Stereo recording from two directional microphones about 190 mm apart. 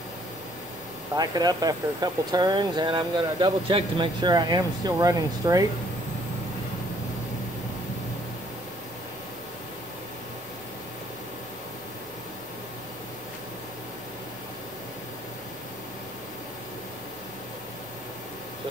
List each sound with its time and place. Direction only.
1.1 s speech: 20° right (ahead or behind)